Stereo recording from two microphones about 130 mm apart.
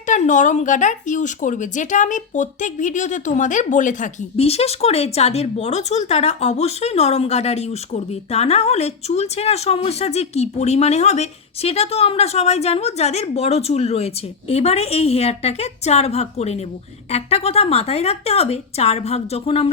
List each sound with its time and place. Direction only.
0.1 s speech: 75° left (ahead or behind)
4.4 s speech: 50° left (ahead or behind)